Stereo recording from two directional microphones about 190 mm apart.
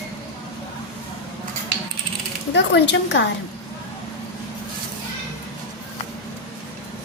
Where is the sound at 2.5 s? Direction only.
65° left (ahead or behind).